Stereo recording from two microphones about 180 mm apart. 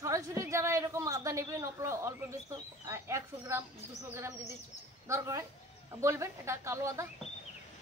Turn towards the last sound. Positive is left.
turn(degrees=-15)  # may be behind; listen again after turning